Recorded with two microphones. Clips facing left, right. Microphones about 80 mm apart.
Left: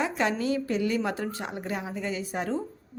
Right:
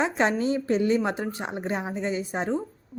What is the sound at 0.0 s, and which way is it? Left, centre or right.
A woman's voice, right.